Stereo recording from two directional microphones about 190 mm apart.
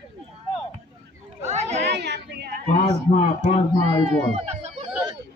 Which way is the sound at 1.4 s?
35° right (ahead or behind).